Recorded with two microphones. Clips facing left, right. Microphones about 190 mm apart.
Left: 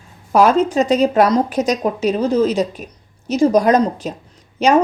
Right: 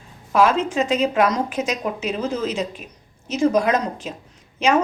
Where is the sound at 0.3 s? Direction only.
40° left (ahead or behind).